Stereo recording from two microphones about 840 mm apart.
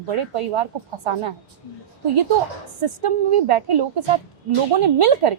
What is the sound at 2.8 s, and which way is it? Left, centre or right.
A woman's voice, right.